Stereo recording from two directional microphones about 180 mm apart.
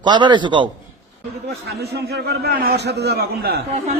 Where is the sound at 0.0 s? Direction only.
25° right (ahead or behind).